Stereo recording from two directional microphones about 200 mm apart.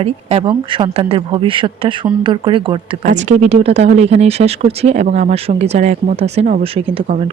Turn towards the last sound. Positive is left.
turn(degrees=-30)  # may be behind; listen again after turning